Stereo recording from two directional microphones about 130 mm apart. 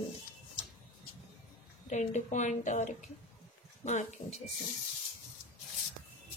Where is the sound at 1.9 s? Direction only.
65° left (ahead or behind).